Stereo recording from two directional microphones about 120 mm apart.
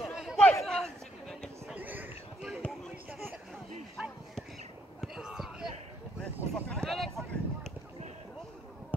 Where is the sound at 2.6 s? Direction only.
10° left (ahead or behind).